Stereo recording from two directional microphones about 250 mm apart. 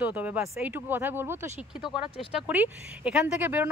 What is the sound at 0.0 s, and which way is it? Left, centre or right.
Speech, centre.